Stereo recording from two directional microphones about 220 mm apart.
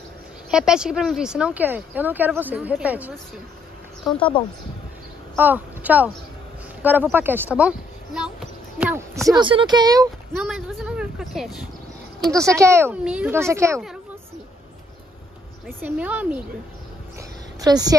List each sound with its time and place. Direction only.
0.5 s a woman's voice: 5° right (ahead or behind)
5.4 s speech: 10° right (ahead or behind)
9.4 s speech: 20° right (ahead or behind)
10.4 s a woman's voice: centre (ahead or behind)
12.4 s speech: 15° right (ahead or behind)
15.6 s speech: 5° right (ahead or behind)
17.6 s a woman's voice: 15° right (ahead or behind)